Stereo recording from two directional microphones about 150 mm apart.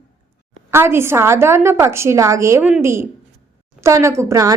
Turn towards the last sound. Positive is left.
turn(degrees=-20)  # may be behind; listen again after turning